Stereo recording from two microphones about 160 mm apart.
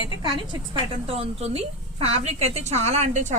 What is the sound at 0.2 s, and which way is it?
A woman's voice, 30° right (ahead or behind).